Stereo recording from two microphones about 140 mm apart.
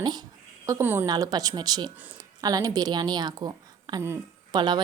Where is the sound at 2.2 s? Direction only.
25° right (ahead or behind).